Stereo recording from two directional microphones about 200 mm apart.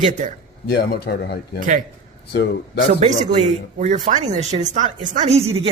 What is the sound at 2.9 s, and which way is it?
A man's voice, 35° right (ahead or behind).